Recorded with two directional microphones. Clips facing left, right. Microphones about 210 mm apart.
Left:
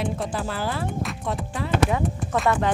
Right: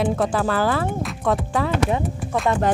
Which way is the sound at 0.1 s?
90° right.